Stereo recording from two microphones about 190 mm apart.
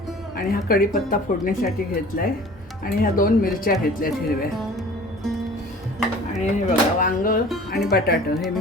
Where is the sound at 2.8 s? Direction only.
50° left (ahead or behind).